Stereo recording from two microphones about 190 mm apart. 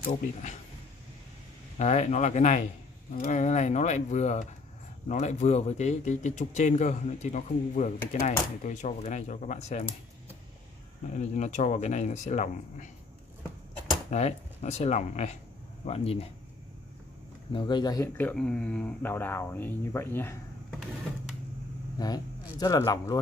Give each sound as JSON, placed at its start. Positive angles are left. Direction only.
{"t": 1.8, "sound": "speech", "side_deg": 35}
{"t": 11.1, "sound": "speech", "side_deg": 40}
{"t": 14.1, "sound": "speech", "side_deg": 35}
{"t": 17.5, "sound": "speech", "side_deg": 25}
{"t": 21.9, "sound": "speech", "side_deg": 20}